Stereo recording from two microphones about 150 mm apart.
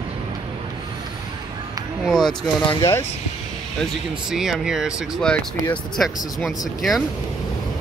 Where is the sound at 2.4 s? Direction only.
35° left (ahead or behind).